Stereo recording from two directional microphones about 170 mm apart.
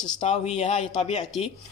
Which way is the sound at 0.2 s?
40° left (ahead or behind).